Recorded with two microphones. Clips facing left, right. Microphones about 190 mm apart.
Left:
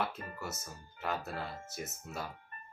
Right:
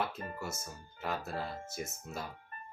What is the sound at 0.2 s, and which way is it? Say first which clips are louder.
Speech: right 3 dB; 30° right (ahead or behind).